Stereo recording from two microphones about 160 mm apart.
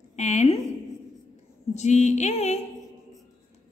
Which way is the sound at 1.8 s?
45° left (ahead or behind).